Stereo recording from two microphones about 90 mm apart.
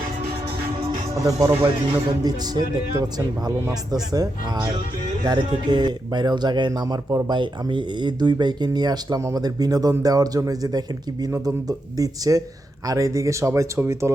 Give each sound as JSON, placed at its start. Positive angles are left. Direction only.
{"t": 1.1, "sound": "speech", "side_deg": -40}
{"t": 5.4, "sound": "speech", "side_deg": -55}
{"t": 7.3, "sound": "speech", "side_deg": -60}